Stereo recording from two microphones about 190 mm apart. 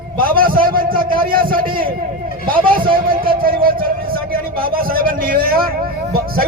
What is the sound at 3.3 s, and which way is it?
A man's voice, 50° right (ahead or behind).